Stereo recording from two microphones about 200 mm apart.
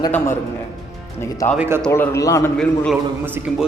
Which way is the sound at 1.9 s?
15° left (ahead or behind).